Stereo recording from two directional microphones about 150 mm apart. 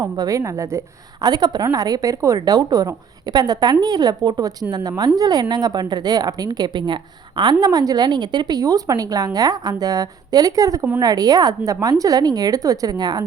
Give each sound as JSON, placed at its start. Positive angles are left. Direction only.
{"t": 0.0, "sound": "a woman's voice", "side_deg": -20}